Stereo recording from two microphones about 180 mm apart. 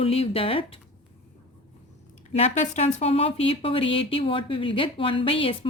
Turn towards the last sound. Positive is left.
turn(degrees=30)  # may be behind; listen again after turning